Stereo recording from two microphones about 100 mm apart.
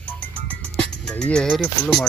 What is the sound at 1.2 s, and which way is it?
Music, 10° left (ahead or behind).